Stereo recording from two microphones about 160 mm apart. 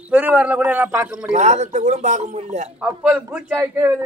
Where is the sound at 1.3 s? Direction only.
45° right (ahead or behind).